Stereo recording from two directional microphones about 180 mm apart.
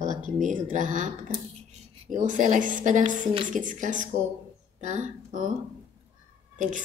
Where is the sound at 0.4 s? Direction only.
45° right (ahead or behind).